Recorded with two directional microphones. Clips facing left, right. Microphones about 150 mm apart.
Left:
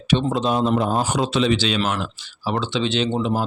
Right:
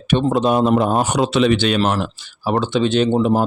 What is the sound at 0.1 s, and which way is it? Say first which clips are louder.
A man's voice: right 4 dB; 55° right (ahead or behind).